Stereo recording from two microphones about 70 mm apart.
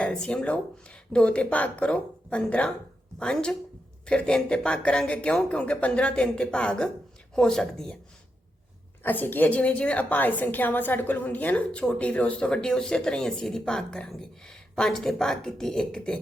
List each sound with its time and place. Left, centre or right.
0.0 s a woman's voice: centre
9.0 s a woman's voice: left; by 16.1 s centre